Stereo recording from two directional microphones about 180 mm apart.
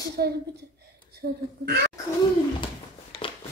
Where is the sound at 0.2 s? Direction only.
60° right (ahead or behind).